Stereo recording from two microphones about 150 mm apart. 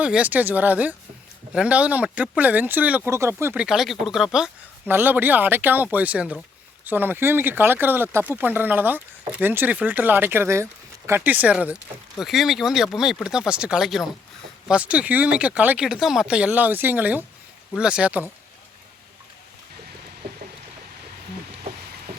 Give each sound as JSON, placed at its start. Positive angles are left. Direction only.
{"t": 0.0, "sound": "speech", "side_deg": -10}